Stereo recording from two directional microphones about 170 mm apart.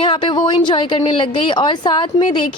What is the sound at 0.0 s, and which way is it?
A woman's voice, 30° left (ahead or behind).